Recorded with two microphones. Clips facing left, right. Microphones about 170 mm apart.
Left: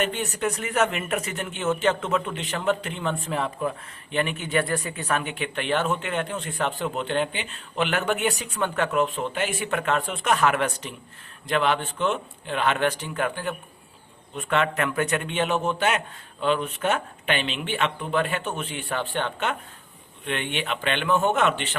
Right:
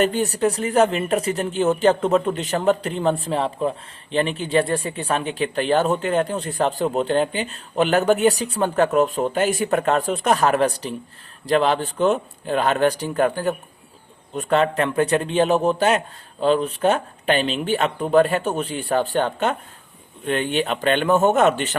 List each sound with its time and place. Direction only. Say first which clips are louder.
0.0 s speech: right 7 dB; 35° right (ahead or behind)